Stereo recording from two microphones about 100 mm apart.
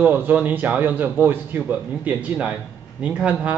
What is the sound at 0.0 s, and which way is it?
A man's voice, 20° right (ahead or behind).